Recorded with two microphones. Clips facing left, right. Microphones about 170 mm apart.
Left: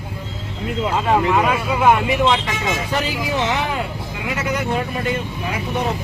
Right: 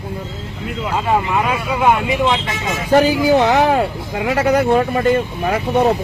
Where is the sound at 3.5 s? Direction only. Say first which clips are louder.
Right 8 dB; 45° right (ahead or behind).